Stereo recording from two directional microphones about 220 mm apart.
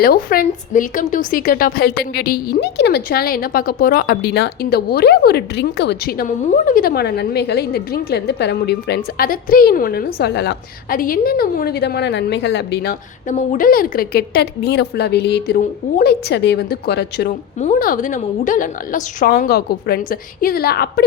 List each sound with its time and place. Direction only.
0.0 s a woman's voice: 45° left (ahead or behind)
17.6 s a woman's voice: 35° left (ahead or behind)